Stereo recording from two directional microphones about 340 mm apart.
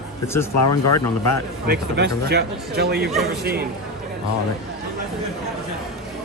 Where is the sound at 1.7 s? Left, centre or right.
Right.